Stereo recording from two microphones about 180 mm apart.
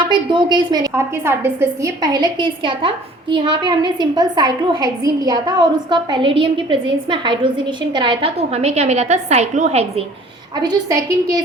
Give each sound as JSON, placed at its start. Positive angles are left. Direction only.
{"t": 0.1, "sound": "a woman's voice", "side_deg": -25}
{"t": 10.6, "sound": "a woman's voice", "side_deg": -20}